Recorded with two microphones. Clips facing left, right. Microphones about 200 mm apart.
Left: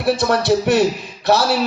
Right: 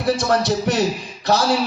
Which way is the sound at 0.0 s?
65° left (ahead or behind).